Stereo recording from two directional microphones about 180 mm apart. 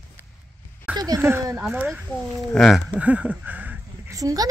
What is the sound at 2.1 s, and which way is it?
Speech, centre (ahead or behind).